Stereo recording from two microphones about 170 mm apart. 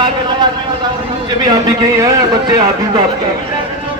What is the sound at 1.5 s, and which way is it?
Speech, 20° right (ahead or behind).